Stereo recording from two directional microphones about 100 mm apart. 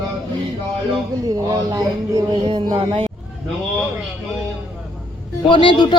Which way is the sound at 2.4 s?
55° right (ahead or behind).